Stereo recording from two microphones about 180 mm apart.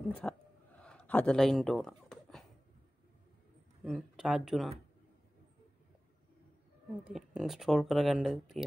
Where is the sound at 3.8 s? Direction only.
5° right (ahead or behind).